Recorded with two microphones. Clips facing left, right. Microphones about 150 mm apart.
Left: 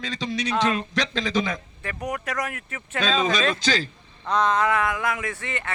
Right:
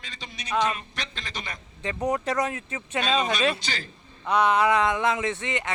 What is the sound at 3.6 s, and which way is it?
Speech, 90° left.